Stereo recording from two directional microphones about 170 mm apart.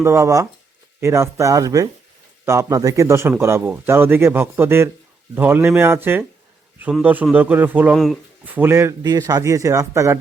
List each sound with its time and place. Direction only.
0.0 s speech: 15° right (ahead or behind)
7.9 s speech: centre (ahead or behind)
8.4 s speech: 10° right (ahead or behind)